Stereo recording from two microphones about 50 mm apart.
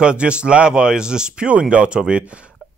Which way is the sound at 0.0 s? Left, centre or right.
Right.